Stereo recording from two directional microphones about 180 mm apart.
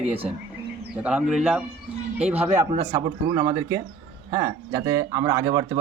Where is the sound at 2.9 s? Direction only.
20° right (ahead or behind).